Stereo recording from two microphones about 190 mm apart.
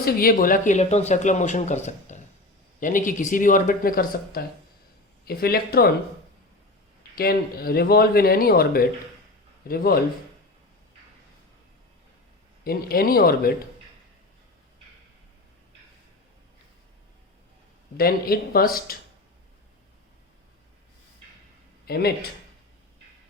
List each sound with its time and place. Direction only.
0.0 s speech: 50° left (ahead or behind)
7.2 s speech: 55° left (ahead or behind)
12.6 s speech: 50° left (ahead or behind)
17.9 s speech: 50° left (ahead or behind)
21.8 s speech: 55° left (ahead or behind)